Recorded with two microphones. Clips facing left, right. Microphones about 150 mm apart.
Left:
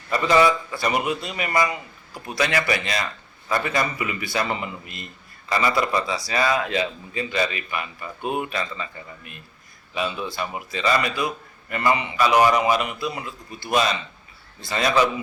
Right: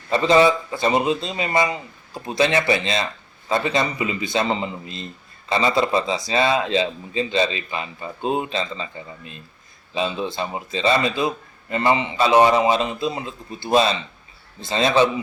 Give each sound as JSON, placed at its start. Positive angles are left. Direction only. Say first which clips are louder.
{"t": 0.1, "sound": "speech", "louder": "right 3 dB", "side_deg": -25}